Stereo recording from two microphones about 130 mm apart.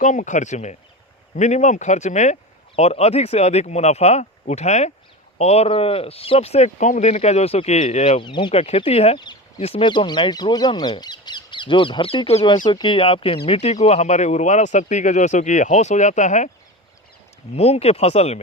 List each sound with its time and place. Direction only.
0.0 s speech: 70° left (ahead or behind)
8.2 s speech: 35° left (ahead or behind)
9.1 s speech: 35° left (ahead or behind)
9.6 s speech: 50° left (ahead or behind)
9.8 s speech: 35° left (ahead or behind)
12.6 s speech: 35° left (ahead or behind); by 16.5 s 65° left (ahead or behind)
17.5 s speech: 50° left (ahead or behind)